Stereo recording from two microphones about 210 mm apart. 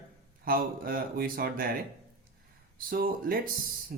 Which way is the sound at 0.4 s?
45° right (ahead or behind).